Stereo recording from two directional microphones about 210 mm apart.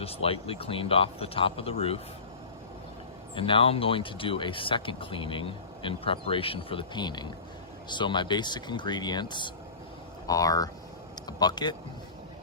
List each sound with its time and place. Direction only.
0.0 s speech: 25° left (ahead or behind)
3.3 s speech: 25° left (ahead or behind)